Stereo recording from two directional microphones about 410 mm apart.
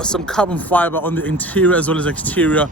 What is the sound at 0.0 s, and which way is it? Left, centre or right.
Speech, centre.